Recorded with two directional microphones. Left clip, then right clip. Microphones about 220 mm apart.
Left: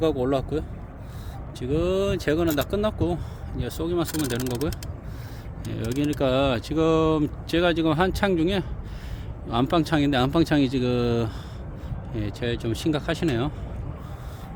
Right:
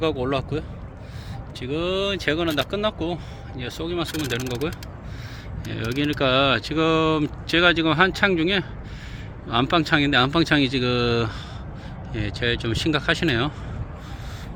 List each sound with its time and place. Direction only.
0.0 s speech: 25° left (ahead or behind)
5.7 s speech: 10° left (ahead or behind)